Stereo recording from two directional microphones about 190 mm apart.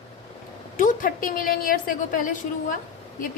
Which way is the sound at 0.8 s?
45° left (ahead or behind).